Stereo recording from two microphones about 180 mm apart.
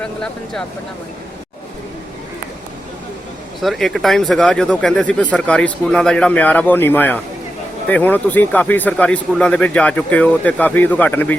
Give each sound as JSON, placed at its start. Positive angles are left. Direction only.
{"t": 0.0, "sound": "speech", "side_deg": 5}
{"t": 3.6, "sound": "speech", "side_deg": 0}